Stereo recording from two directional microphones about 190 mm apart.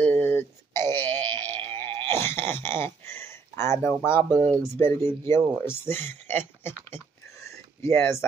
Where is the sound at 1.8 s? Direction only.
10° left (ahead or behind).